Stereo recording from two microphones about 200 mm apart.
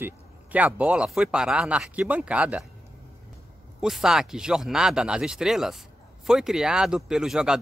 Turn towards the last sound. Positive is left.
turn(degrees=-5)  # may be behind; listen again after turning